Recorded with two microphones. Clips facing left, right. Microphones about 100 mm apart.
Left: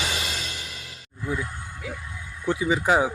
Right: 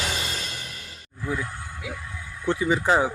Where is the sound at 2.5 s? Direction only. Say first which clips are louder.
Even; 10° left (ahead or behind).